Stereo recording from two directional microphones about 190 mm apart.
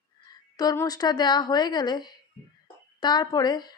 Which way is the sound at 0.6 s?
20° left (ahead or behind).